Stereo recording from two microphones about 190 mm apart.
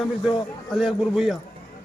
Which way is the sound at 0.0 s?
Centre (ahead or behind).